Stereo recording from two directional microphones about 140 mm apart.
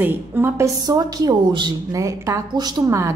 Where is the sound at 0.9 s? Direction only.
30° right (ahead or behind).